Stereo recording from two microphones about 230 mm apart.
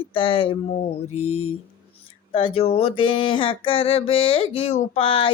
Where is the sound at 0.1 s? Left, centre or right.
Left.